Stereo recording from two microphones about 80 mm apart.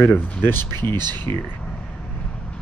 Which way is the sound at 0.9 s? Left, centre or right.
Right.